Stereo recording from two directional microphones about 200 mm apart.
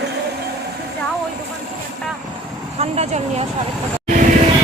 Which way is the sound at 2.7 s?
30° right (ahead or behind).